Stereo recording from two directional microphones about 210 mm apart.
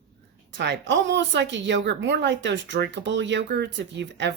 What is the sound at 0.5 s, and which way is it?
A woman's voice, 55° right (ahead or behind).